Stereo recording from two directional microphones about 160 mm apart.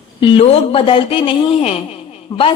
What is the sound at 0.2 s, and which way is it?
A woman's voice, 35° left (ahead or behind).